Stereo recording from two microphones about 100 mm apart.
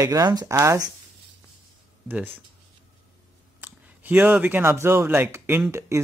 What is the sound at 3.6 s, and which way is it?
Speech, 20° right (ahead or behind).